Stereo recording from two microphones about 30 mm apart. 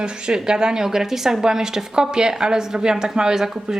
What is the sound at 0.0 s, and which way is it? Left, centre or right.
Speech, right.